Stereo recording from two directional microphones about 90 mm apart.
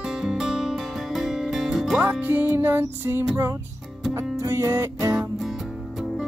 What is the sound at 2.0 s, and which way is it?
Music, 20° right (ahead or behind).